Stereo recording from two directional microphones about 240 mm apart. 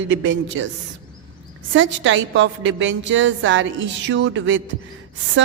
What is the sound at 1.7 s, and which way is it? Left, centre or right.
A woman's voice, right.